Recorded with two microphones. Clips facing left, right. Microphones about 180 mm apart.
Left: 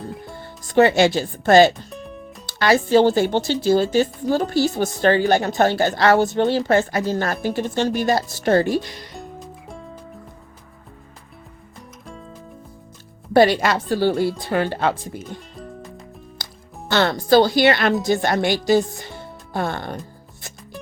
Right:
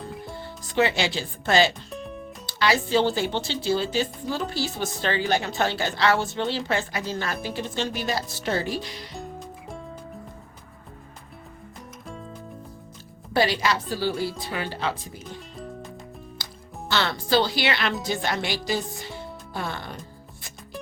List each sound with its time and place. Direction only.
0.4 s speech: 50° left (ahead or behind)
1.9 s music: centre (ahead or behind)
2.5 s speech: 50° left (ahead or behind)
9.1 s music: centre (ahead or behind)
12.0 s music: centre (ahead or behind)
13.3 s speech: 55° left (ahead or behind)
15.5 s music: centre (ahead or behind)
16.9 s speech: 50° left (ahead or behind)